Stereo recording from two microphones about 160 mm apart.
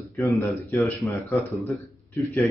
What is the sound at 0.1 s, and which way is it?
Speech, 15° left (ahead or behind).